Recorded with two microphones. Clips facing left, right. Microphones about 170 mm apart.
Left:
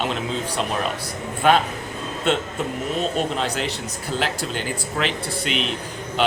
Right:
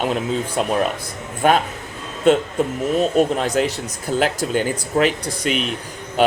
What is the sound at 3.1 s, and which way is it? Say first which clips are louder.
Speech: right 7 dB; 45° right (ahead or behind).